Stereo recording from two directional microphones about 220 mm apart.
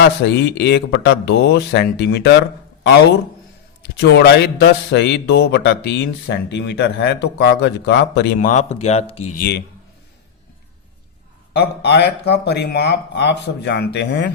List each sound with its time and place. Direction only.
0.0 s speech: 50° left (ahead or behind)
4.1 s speech: 50° left (ahead or behind)
8.4 s speech: 35° left (ahead or behind)
9.4 s speech: 50° left (ahead or behind)
11.5 s speech: 50° left (ahead or behind)